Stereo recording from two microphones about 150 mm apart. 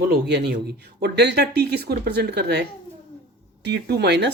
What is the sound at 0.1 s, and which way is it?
Speech, 90° right.